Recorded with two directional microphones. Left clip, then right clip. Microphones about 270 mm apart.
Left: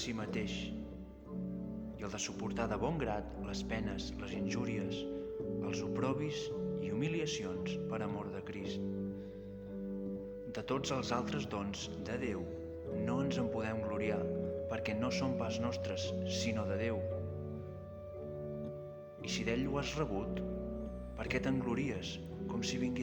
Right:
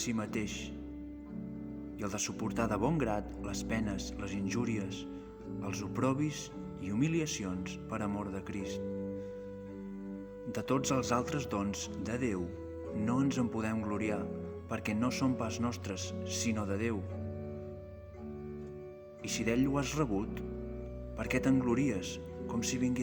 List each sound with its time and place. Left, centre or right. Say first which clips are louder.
0.0 s speech: right 3 dB; right
2.0 s speech: right 4 dB; right
10.5 s speech: right 5 dB; right
19.3 s speech: right 4 dB; right